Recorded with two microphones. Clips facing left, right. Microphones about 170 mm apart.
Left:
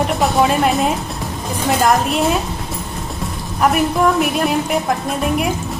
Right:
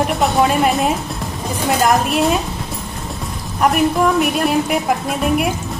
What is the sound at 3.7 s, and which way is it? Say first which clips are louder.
Speech: right 1 dB; centre (ahead or behind).